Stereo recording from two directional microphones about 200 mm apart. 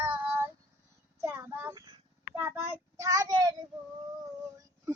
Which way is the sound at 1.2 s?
10° right (ahead or behind).